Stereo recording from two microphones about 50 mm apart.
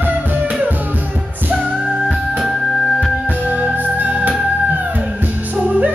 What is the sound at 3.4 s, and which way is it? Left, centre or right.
Music, right.